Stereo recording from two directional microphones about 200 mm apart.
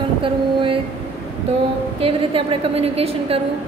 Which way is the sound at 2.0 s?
30° right (ahead or behind).